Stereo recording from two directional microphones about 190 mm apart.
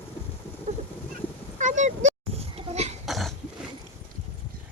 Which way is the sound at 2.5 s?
35° right (ahead or behind).